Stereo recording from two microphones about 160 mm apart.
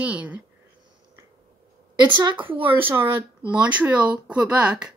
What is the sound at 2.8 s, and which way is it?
Speech, 15° right (ahead or behind).